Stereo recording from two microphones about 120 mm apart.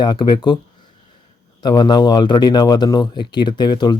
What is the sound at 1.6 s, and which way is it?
Speech, 35° left (ahead or behind).